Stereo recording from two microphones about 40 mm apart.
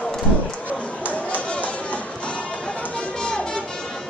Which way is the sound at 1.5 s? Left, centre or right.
Left.